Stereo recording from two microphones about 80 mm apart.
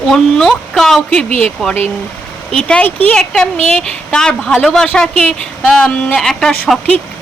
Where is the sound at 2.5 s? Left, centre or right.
Centre.